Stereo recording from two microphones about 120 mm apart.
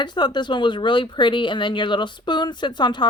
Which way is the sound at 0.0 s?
40° left (ahead or behind).